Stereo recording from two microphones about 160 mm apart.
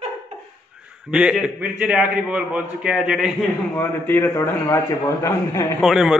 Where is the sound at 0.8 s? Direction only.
5° right (ahead or behind).